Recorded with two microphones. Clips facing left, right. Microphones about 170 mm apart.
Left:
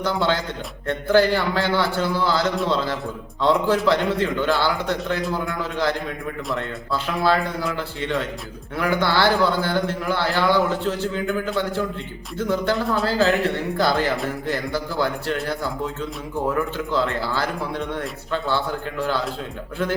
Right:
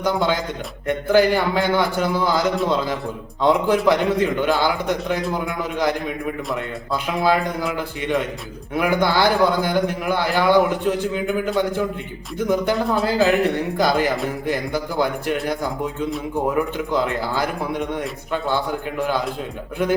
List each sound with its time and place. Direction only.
0.0 s a man's voice: 15° right (ahead or behind)